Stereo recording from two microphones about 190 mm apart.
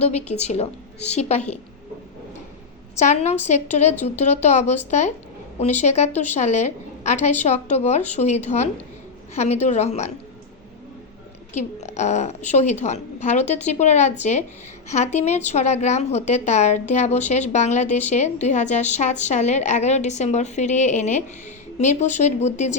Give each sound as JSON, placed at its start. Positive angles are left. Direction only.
{"t": 0.0, "sound": "a woman's voice", "side_deg": 35}
{"t": 3.0, "sound": "a woman's voice", "side_deg": 35}
{"t": 11.5, "sound": "a woman's voice", "side_deg": 35}